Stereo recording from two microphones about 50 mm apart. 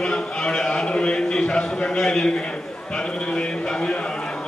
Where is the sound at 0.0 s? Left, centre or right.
Centre.